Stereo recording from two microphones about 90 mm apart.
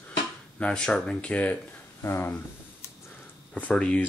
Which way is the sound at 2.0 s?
30° left (ahead or behind).